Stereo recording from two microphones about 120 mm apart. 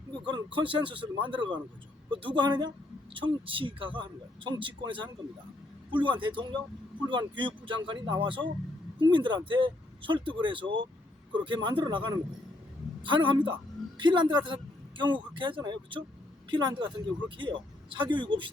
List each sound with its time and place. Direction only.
0.3 s a man's voice: 45° right (ahead or behind)